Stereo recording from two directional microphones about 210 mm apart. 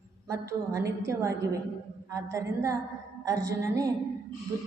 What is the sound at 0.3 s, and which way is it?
A woman's voice, 15° right (ahead or behind).